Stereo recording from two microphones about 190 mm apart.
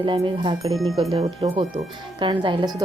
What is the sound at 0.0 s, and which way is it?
Speech, 25° right (ahead or behind).